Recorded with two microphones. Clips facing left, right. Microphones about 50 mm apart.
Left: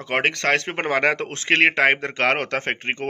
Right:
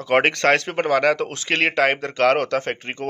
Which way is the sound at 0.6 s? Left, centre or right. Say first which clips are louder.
Right 2 dB; left.